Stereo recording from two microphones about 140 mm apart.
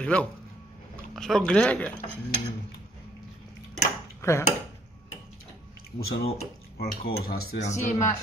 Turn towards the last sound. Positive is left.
turn(degrees=55)  # may be behind; listen again after turning